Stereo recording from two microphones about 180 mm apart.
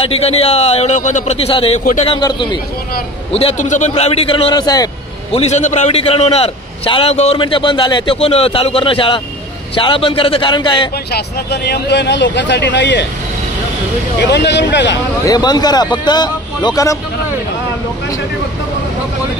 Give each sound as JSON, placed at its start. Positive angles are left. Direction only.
{"t": 0.0, "sound": "a man's voice", "side_deg": 35}
{"t": 5.3, "sound": "a man's voice", "side_deg": 40}
{"t": 11.1, "sound": "speech", "side_deg": 65}
{"t": 14.2, "sound": "speech", "side_deg": 70}
{"t": 15.2, "sound": "speech", "side_deg": 20}